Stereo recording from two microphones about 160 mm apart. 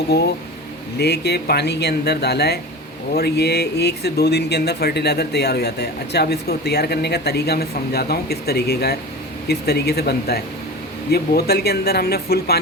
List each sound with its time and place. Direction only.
0.1 s speech: 90° left